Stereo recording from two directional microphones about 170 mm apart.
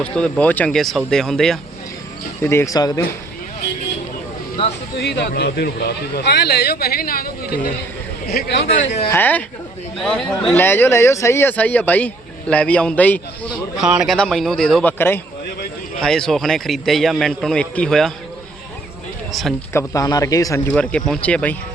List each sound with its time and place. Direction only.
0.0 s a man's voice: 5° left (ahead or behind)
2.4 s speech: 15° left (ahead or behind)
4.9 s speech: 80° left; by 7.7 s 55° left (ahead or behind)
8.3 s speech: 75° left (ahead or behind)
9.0 s speech: 10° left (ahead or behind)
13.7 s a man's voice: 5° right (ahead or behind)
19.3 s speech: centre (ahead or behind)
19.7 s speech: 20° left (ahead or behind)
20.7 s speech: 5° left (ahead or behind)